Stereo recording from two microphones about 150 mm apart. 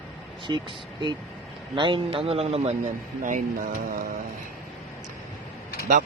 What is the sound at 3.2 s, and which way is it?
Speech, 65° right (ahead or behind).